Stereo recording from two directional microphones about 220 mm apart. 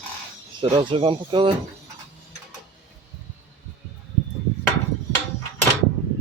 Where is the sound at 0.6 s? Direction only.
25° right (ahead or behind).